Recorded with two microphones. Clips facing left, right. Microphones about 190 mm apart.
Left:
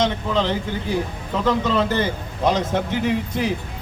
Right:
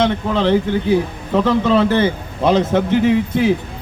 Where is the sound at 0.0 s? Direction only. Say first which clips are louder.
Right 4 dB; 60° right (ahead or behind).